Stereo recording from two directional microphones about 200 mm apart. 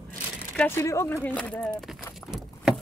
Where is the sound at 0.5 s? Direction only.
10° left (ahead or behind).